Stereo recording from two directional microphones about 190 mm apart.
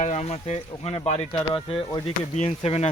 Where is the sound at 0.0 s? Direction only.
35° left (ahead or behind).